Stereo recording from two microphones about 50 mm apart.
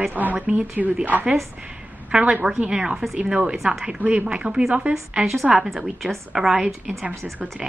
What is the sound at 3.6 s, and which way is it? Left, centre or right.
Speech, right.